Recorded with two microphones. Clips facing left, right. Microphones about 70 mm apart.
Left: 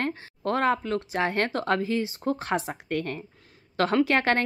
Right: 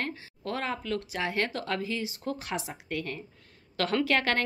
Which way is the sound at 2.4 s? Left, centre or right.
Left.